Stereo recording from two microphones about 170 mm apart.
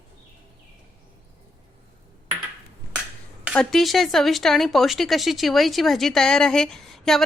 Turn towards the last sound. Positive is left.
turn(degrees=0)  # may be behind; listen again after turning